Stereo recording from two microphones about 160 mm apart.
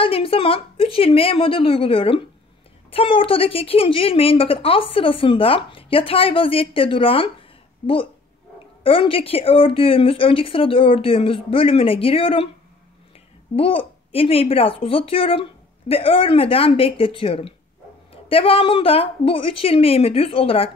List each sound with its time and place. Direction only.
0.0 s a woman's voice: 35° left (ahead or behind)
13.6 s a woman's voice: 35° left (ahead or behind)